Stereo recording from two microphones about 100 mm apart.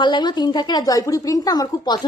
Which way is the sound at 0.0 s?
50° left (ahead or behind).